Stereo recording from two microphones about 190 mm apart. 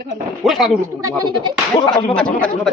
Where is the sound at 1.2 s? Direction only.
20° right (ahead or behind).